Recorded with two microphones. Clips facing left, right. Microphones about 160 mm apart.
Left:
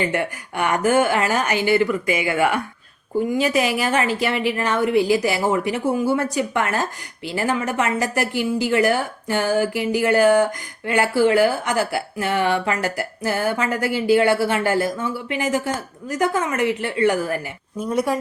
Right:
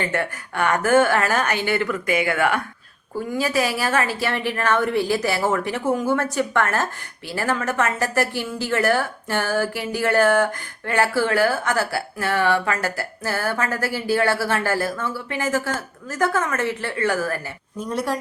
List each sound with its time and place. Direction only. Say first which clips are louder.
0.0 s speech: left 2 dB; 15° left (ahead or behind)